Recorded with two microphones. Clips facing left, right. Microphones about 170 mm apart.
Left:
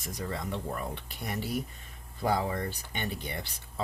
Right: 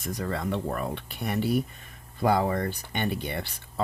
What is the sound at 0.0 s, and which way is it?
Speech, 60° right (ahead or behind).